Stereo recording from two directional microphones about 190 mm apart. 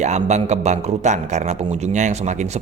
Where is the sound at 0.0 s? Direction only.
40° right (ahead or behind).